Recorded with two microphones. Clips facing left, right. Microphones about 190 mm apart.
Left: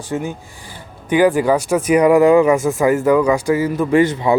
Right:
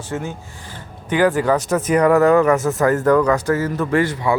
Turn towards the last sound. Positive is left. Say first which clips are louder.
# left 4 dB
turn(degrees=20)  # may be behind; listen again after turning